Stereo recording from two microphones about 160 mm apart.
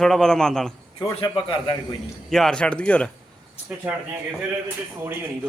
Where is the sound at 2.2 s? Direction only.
5° left (ahead or behind).